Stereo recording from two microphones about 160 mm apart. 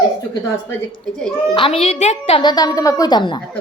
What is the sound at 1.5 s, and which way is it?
Speech, 35° left (ahead or behind).